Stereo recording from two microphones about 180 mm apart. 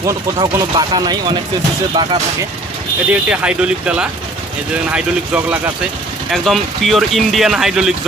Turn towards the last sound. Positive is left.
turn(degrees=0)  # may be behind; listen again after turning